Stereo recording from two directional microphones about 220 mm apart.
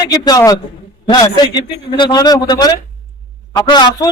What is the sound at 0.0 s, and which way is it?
A man's voice, 20° left (ahead or behind).